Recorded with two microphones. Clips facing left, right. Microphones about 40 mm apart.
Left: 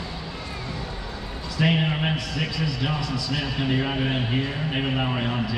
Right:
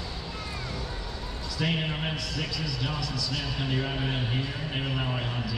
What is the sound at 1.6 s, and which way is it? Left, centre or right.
A man's voice, left.